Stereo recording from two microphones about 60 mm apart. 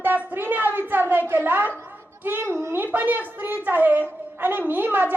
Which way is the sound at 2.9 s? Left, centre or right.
Right.